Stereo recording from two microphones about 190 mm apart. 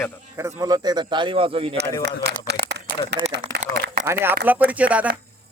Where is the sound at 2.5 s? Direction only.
60° right (ahead or behind).